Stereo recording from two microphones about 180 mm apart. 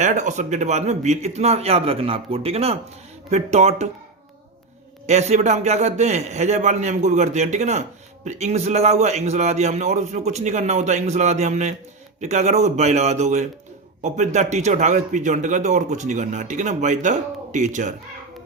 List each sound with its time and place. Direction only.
0.0 s a man's voice: 40° right (ahead or behind)
5.0 s a man's voice: 40° right (ahead or behind)